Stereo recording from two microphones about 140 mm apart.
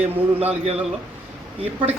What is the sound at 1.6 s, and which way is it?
Speech, 40° right (ahead or behind).